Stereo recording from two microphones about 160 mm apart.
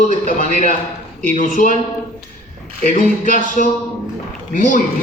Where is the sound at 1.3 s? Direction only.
55° left (ahead or behind).